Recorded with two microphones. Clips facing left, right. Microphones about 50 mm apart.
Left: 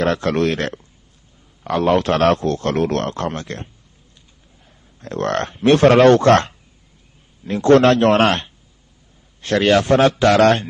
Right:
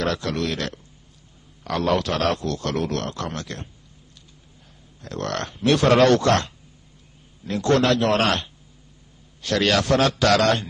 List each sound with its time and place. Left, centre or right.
0.0 s speech: left
5.0 s a man's voice: left